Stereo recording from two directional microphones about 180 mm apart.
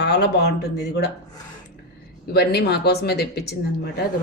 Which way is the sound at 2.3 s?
65° left (ahead or behind).